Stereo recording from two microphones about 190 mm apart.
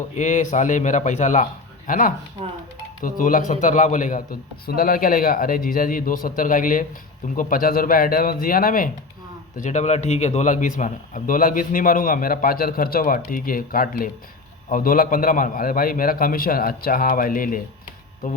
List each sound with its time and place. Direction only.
0.2 s a man's voice: 40° left (ahead or behind)